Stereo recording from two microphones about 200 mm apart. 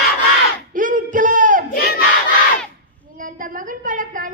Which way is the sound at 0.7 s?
40° right (ahead or behind).